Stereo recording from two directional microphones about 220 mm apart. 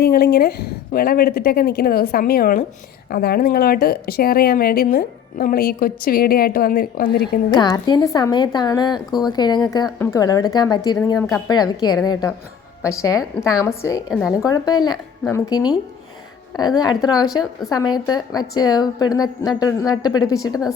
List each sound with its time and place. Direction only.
0.0 s speech: 45° left (ahead or behind)
7.6 s speech: 20° left (ahead or behind)
14.1 s speech: centre (ahead or behind)
14.4 s speech: 15° left (ahead or behind)